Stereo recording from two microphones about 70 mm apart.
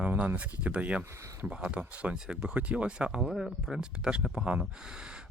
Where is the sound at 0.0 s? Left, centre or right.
Centre.